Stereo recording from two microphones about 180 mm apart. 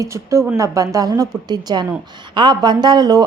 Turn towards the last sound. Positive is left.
turn(degrees=-20)  # may be behind; listen again after turning